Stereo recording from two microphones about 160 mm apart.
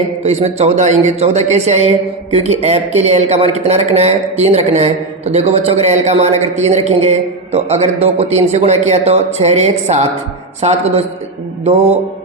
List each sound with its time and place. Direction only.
0.2 s a man's voice: 40° right (ahead or behind)